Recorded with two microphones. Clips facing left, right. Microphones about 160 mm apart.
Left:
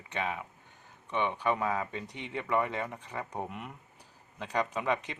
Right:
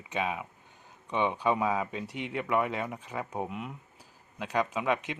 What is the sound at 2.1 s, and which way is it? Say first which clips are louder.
Speech: right 6 dB; 90° right.